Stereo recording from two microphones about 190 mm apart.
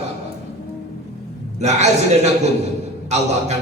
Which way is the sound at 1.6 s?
35° right (ahead or behind).